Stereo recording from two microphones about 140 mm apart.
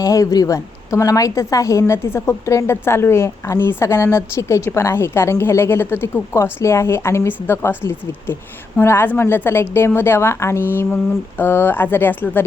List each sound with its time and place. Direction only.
0.0 s speech: 25° left (ahead or behind)